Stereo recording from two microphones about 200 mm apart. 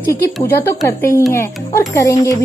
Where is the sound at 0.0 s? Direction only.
10° left (ahead or behind).